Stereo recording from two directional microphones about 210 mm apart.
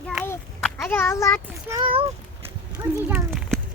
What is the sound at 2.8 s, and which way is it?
Speech, 10° right (ahead or behind).